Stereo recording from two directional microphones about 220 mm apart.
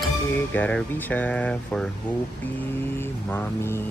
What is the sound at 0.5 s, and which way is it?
Speech, 5° left (ahead or behind).